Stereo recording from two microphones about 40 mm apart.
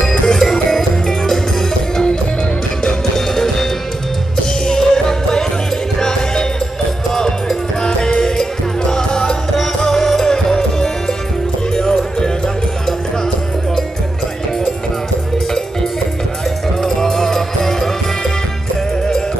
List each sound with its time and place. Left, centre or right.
0.0 s music: centre
3.2 s music: centre
4.6 s music: centre
16.8 s music: centre